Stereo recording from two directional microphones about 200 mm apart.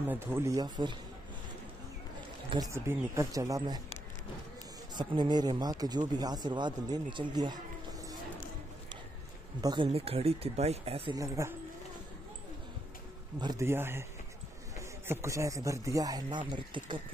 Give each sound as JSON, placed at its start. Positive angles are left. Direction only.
{"t": 0.1, "sound": "speech", "side_deg": -10}
{"t": 2.5, "sound": "speech", "side_deg": -15}
{"t": 4.9, "sound": "speech", "side_deg": -20}
{"t": 9.6, "sound": "speech", "side_deg": -20}
{"t": 11.1, "sound": "speech", "side_deg": -15}
{"t": 13.4, "sound": "speech", "side_deg": -15}